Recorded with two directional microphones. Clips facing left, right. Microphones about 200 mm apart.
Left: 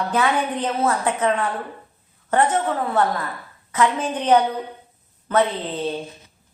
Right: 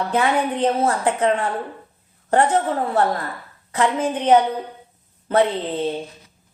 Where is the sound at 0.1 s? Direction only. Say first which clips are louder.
Right 2 dB; 25° right (ahead or behind).